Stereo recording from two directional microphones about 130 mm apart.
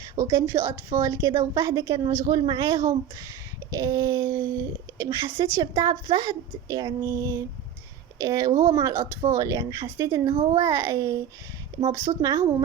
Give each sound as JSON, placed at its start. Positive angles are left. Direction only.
{"t": 0.2, "sound": "speech", "side_deg": -20}